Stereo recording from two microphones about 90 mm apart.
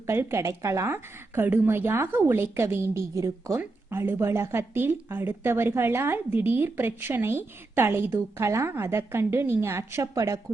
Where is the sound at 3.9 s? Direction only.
25° right (ahead or behind).